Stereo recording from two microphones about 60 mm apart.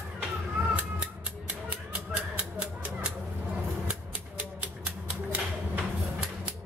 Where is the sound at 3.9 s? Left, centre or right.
Right.